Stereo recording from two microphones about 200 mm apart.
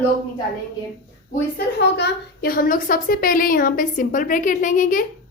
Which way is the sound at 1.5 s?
50° left (ahead or behind).